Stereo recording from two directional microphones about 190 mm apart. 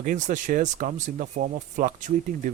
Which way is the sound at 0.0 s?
45° right (ahead or behind).